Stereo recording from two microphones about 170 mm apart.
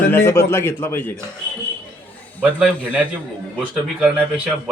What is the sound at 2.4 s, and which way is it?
A man's voice, 10° right (ahead or behind).